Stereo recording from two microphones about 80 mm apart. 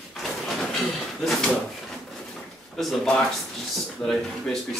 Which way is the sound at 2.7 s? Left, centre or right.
Centre.